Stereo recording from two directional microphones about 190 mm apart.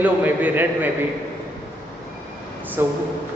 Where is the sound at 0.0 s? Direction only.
10° right (ahead or behind).